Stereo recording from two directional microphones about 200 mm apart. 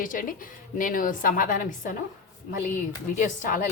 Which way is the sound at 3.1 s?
40° left (ahead or behind).